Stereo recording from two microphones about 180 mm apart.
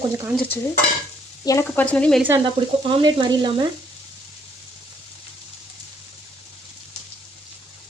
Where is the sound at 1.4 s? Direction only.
15° left (ahead or behind).